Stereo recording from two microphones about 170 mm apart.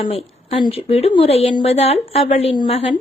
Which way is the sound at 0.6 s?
35° left (ahead or behind).